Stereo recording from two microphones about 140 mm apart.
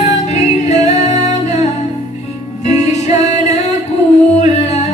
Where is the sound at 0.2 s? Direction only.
55° left (ahead or behind).